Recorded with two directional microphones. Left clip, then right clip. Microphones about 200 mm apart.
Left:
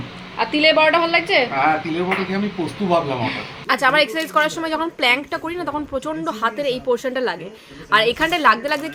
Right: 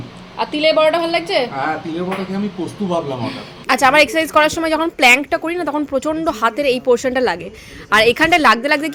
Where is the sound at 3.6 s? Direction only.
35° right (ahead or behind).